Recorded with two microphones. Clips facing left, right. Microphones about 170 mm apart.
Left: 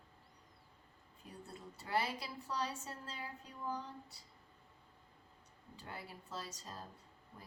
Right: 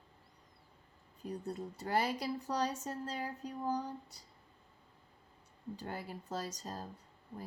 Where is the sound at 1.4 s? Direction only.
40° right (ahead or behind).